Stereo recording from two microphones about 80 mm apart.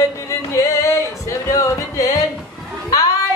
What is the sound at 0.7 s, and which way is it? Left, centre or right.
Music, left.